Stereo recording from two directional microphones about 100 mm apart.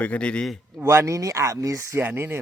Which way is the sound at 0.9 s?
30° right (ahead or behind).